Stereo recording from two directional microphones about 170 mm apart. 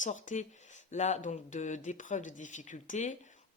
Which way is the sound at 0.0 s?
45° left (ahead or behind).